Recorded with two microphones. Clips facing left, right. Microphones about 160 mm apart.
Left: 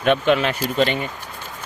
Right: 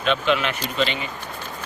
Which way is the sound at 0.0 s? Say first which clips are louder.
Left 4 dB; 55° left (ahead or behind).